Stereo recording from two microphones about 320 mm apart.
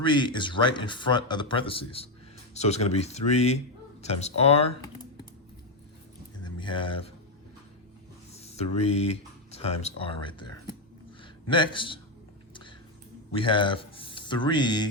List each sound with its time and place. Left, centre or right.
0.0 s speech: centre
6.4 s speech: centre
8.4 s speech: centre
9.5 s a sound: centre
9.8 s speech: centre
11.2 s a sound: centre
13.3 s speech: centre